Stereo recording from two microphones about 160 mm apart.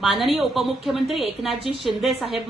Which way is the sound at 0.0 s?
Centre (ahead or behind).